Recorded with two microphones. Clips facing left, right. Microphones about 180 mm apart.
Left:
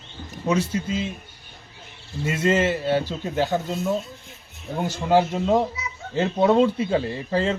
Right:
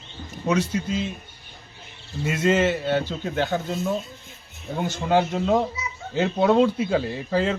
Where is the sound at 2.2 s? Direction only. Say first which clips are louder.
Even; centre (ahead or behind).